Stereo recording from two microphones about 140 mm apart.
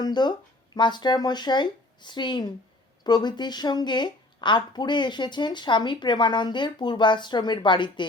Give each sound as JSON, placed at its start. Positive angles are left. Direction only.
{"t": 0.0, "sound": "speech", "side_deg": 30}